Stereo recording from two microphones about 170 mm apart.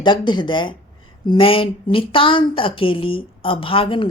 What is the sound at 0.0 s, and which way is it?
A woman's voice, 25° left (ahead or behind).